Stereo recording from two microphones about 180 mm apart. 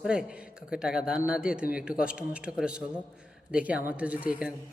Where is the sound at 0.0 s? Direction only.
5° right (ahead or behind).